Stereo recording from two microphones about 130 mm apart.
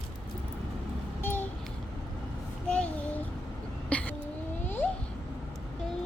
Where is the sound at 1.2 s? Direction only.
15° left (ahead or behind).